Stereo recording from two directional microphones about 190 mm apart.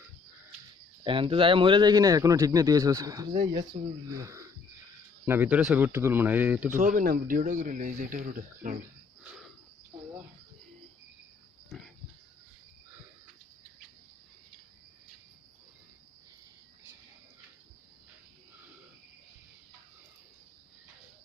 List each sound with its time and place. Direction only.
1.0 s speech: 25° right (ahead or behind); by 6.7 s 10° right (ahead or behind)
6.7 s speech: 45° right (ahead or behind)
11.7 s pig: centre (ahead or behind)